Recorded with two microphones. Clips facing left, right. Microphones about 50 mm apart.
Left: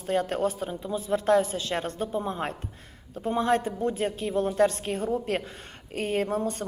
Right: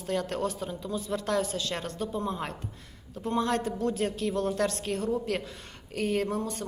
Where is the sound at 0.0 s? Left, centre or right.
Left.